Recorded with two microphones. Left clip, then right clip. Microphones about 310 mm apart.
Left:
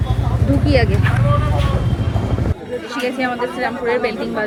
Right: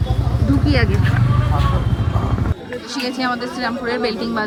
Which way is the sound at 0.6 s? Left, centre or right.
Centre.